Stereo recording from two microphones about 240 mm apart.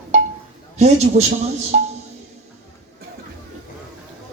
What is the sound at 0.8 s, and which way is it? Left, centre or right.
Speech, right.